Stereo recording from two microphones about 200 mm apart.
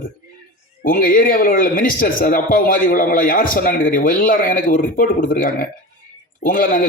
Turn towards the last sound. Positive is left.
turn(degrees=45)  # may be behind; listen again after turning